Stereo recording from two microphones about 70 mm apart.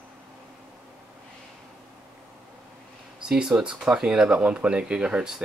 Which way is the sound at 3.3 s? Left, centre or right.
Centre.